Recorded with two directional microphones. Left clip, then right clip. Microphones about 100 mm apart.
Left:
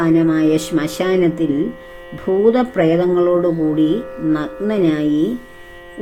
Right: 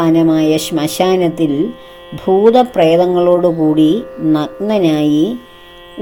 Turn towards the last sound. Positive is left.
turn(degrees=-50)  # may be behind; listen again after turning